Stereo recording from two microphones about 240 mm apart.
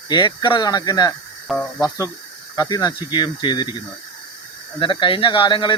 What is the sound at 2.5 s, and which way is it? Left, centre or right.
Speech, centre.